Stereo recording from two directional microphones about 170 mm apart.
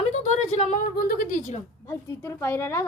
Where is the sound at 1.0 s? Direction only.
60° left (ahead or behind).